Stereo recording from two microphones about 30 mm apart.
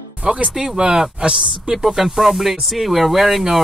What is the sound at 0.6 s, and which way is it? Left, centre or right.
Speech, right.